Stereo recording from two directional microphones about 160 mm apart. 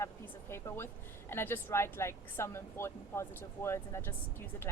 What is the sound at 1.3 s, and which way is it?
Speech, 15° left (ahead or behind).